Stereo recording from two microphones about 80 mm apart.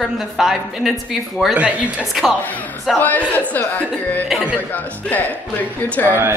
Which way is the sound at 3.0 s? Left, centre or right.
Left.